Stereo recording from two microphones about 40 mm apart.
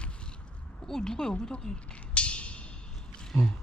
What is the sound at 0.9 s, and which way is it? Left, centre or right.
Speech, centre.